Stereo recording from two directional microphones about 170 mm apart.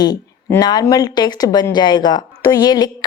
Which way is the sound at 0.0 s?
25° left (ahead or behind).